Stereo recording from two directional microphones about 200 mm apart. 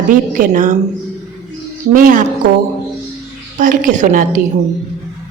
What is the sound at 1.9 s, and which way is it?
Speech, 40° right (ahead or behind).